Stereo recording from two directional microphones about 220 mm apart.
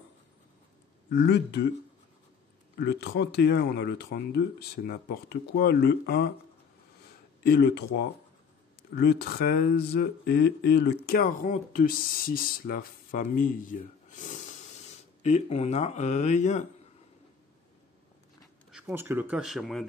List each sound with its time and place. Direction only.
1.1 s speech: 50° left (ahead or behind)
2.8 s speech: 50° left (ahead or behind)
7.4 s speech: 50° left (ahead or behind)
8.9 s speech: 50° left (ahead or behind); by 16.6 s 30° left (ahead or behind)
18.7 s speech: 5° right (ahead or behind)